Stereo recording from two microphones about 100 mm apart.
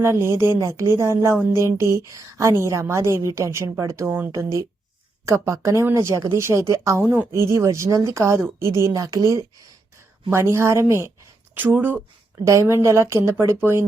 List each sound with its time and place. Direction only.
0.0 s a woman's voice: 30° right (ahead or behind)